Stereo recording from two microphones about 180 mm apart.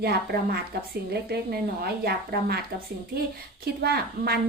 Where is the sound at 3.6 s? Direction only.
60° right (ahead or behind).